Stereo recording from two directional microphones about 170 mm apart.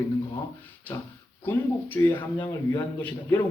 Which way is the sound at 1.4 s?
10° left (ahead or behind).